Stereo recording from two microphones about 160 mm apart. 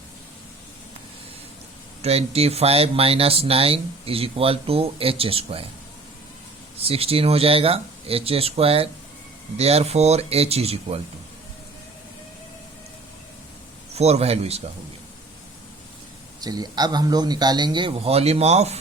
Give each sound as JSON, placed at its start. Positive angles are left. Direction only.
{"t": 2.0, "sound": "speech", "side_deg": -40}
{"t": 6.8, "sound": "speech", "side_deg": -35}
{"t": 13.9, "sound": "speech", "side_deg": -40}
{"t": 16.4, "sound": "a man's voice", "side_deg": -25}